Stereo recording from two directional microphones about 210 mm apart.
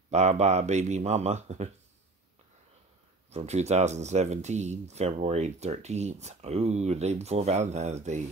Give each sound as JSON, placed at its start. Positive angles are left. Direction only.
{"t": 0.1, "sound": "speech", "side_deg": -30}
{"t": 3.3, "sound": "speech", "side_deg": -30}